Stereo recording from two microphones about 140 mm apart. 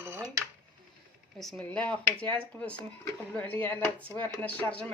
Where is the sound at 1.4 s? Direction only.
Centre (ahead or behind).